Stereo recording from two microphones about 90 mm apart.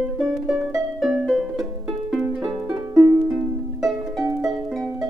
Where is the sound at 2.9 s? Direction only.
35° right (ahead or behind).